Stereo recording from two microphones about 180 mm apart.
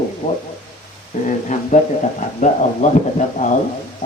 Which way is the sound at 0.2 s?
40° left (ahead or behind).